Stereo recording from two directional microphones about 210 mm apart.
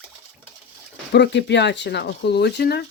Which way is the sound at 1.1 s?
55° left (ahead or behind).